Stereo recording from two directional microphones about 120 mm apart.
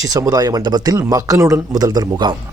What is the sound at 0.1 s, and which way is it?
A man's voice, 30° right (ahead or behind).